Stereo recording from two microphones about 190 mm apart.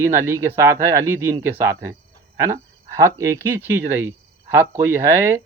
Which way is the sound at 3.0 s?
15° right (ahead or behind).